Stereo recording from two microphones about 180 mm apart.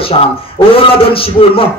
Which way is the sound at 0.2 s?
30° left (ahead or behind).